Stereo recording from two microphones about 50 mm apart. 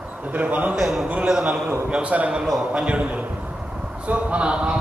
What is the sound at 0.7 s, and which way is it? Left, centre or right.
A man's voice, centre.